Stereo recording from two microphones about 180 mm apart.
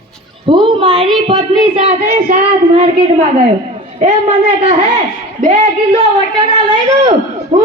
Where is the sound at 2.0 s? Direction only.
45° right (ahead or behind).